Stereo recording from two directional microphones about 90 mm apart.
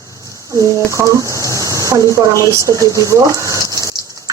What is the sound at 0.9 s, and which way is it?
Speech, 35° right (ahead or behind).